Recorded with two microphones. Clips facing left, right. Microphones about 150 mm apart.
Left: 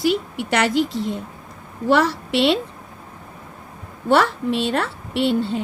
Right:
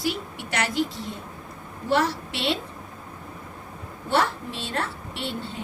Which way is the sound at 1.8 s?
90° left.